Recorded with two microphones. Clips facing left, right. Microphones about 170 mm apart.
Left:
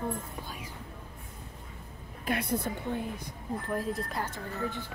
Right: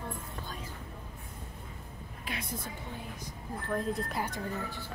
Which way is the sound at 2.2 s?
60° left (ahead or behind).